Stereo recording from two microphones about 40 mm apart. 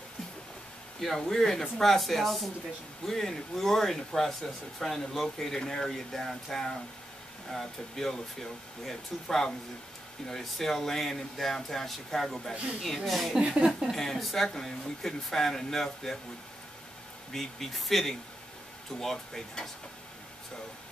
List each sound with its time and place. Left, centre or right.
1.0 s speech: centre
13.4 s a woman's voice: right
13.9 s speech: centre
17.3 s speech: centre